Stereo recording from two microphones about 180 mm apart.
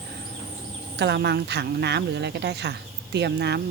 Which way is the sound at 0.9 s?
70° right (ahead or behind).